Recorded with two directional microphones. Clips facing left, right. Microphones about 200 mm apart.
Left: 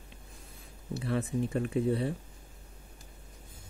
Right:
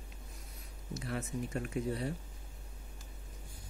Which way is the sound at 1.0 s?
35° left (ahead or behind).